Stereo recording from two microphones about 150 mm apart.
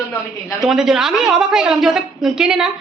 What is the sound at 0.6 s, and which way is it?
A woman's voice, 5° right (ahead or behind).